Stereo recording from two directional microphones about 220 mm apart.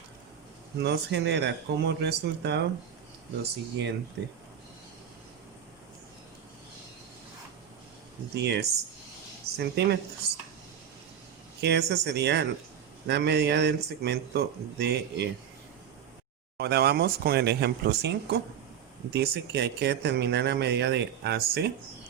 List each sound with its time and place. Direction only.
0.8 s speech: 50° right (ahead or behind)
8.4 s speech: 50° right (ahead or behind)
11.6 s speech: 50° right (ahead or behind)
16.6 s speech: 45° right (ahead or behind)